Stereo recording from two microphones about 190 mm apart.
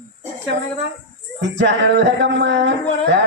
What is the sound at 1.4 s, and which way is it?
Speech, 70° right (ahead or behind).